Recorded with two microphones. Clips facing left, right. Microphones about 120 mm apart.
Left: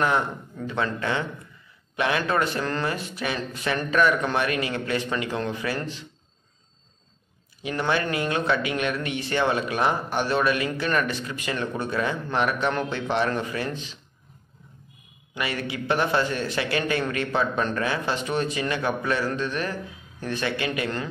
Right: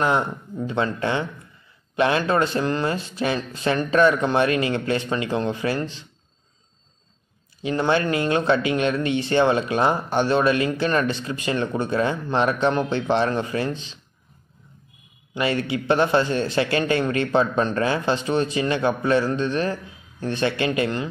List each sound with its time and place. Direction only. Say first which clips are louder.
0.0 s speech: right 2 dB; 25° right (ahead or behind)
2.0 s speech: right 4 dB; 30° right (ahead or behind)
7.6 s speech: right 4 dB; 25° right (ahead or behind)
15.3 s speech: right 6 dB; 30° right (ahead or behind)